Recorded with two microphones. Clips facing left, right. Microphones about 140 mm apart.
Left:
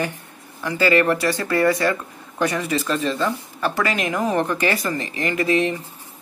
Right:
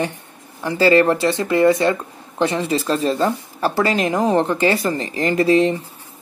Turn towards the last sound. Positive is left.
turn(degrees=-30)  # may be behind; listen again after turning